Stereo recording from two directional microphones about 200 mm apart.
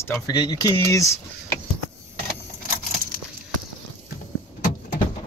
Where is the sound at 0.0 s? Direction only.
15° left (ahead or behind).